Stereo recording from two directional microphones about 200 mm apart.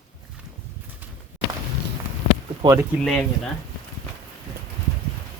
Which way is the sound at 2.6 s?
15° right (ahead or behind).